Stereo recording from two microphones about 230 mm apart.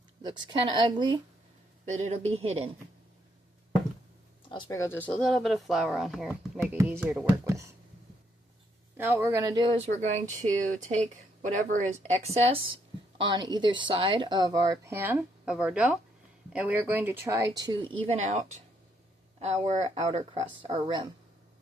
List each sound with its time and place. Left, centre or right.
0.2 s speech: centre
1.8 s speech: right
4.5 s a woman's voice: centre
9.0 s a woman's voice: centre; by 18.6 s right
19.6 s speech: right